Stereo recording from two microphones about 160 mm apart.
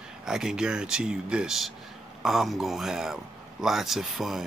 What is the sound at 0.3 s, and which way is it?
Speech, 5° right (ahead or behind).